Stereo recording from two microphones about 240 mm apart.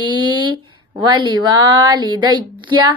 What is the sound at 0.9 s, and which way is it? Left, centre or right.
A woman's voice, centre.